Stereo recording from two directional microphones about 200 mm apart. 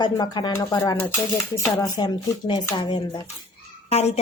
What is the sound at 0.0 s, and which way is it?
Speech, 20° left (ahead or behind).